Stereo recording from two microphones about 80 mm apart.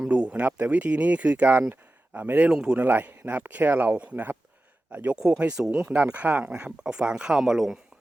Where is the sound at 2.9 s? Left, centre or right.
Right.